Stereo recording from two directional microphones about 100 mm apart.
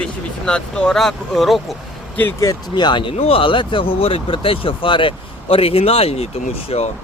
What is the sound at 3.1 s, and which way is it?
Speech, 65° left (ahead or behind).